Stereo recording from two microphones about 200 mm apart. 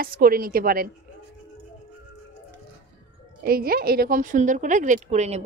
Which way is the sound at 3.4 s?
50° right (ahead or behind).